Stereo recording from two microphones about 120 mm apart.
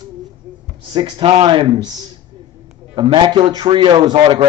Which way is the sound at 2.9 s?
40° right (ahead or behind).